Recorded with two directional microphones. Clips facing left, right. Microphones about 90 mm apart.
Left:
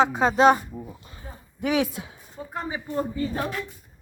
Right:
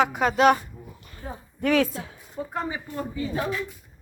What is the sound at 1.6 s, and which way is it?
Speech, 15° left (ahead or behind).